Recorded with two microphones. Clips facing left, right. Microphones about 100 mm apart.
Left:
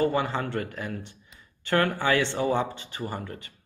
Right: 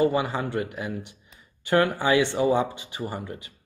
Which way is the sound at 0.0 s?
15° right (ahead or behind).